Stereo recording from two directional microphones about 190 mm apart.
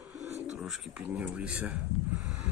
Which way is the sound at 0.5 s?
5° right (ahead or behind).